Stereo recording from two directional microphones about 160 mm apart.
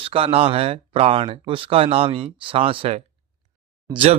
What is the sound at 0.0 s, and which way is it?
Speech, 35° right (ahead or behind).